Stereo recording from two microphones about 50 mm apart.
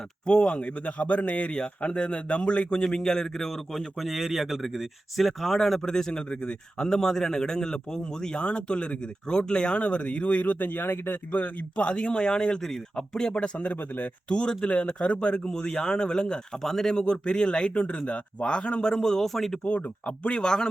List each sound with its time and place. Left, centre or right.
0.3 s a man's voice: centre; by 11.2 s left
11.3 s speech: left
14.3 s a man's voice: centre
18.9 s a man's voice: centre
19.6 s speech: left